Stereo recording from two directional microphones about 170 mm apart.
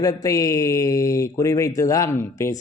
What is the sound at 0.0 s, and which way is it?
Speech, 20° left (ahead or behind).